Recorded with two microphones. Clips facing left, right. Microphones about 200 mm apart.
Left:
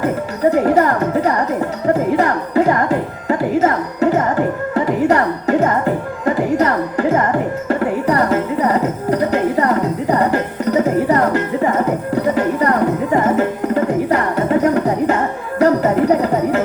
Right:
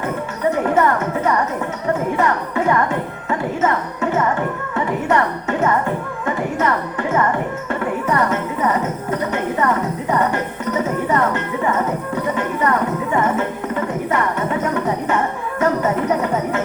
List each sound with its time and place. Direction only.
0.5 s a woman's voice: 35° left (ahead or behind)
1.9 s music: 35° left (ahead or behind)
15.5 s a sound: 35° left (ahead or behind)